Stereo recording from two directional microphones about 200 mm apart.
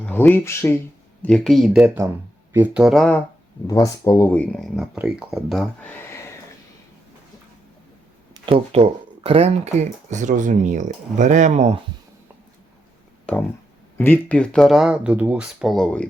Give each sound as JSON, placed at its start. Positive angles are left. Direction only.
{"t": 0.0, "sound": "speech", "side_deg": 10}
{"t": 1.2, "sound": "speech", "side_deg": 0}
{"t": 3.7, "sound": "speech", "side_deg": 15}
{"t": 8.3, "sound": "speech", "side_deg": -25}
{"t": 13.3, "sound": "speech", "side_deg": 5}